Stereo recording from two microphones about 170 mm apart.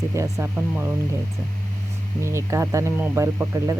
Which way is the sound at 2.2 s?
15° right (ahead or behind).